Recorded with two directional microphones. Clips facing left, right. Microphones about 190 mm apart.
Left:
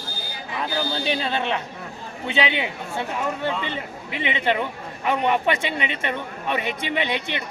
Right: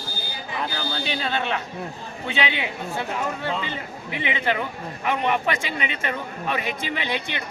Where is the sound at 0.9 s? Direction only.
25° left (ahead or behind).